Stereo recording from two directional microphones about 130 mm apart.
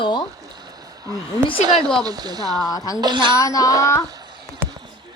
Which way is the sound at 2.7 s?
30° left (ahead or behind).